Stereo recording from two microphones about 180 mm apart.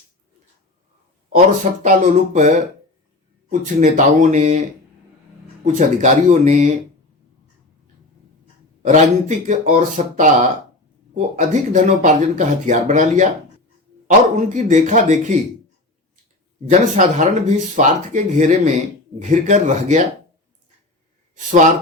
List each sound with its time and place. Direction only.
1.8 s speech: 40° right (ahead or behind)
5.6 s speech: 45° right (ahead or behind)
8.8 s speech: 40° right (ahead or behind)
14.3 s speech: 40° right (ahead or behind)
16.6 s speech: 45° right (ahead or behind)